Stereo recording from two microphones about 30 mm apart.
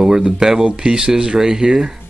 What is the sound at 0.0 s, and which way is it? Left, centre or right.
Speech, centre.